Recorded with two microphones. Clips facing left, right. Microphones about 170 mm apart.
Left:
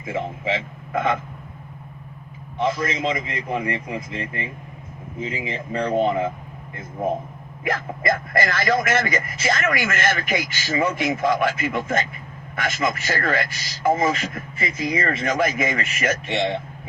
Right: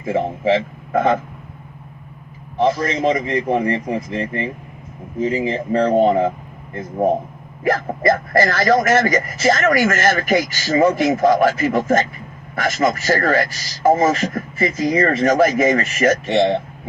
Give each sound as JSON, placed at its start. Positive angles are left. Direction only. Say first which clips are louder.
{"t": 0.0, "sound": "speech", "louder": "right 8 dB", "side_deg": -35}
{"t": 2.6, "sound": "speech", "louder": "right 5 dB", "side_deg": -35}
{"t": 7.6, "sound": "speech", "louder": "right 7 dB", "side_deg": -35}